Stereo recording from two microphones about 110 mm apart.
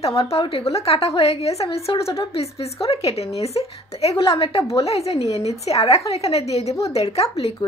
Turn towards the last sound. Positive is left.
turn(degrees=70)  # may be behind; listen again after turning